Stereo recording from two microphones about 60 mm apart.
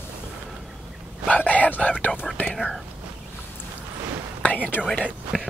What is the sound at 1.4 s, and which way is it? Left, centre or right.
Whispering, left.